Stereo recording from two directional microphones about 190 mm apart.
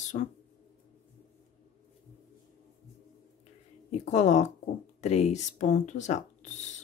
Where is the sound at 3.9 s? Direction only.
40° left (ahead or behind).